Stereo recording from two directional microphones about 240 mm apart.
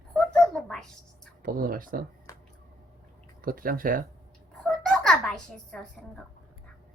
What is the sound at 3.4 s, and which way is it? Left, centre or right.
Speech, right.